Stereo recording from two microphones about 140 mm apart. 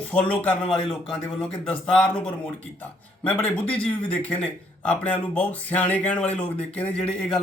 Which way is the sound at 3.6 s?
10° left (ahead or behind).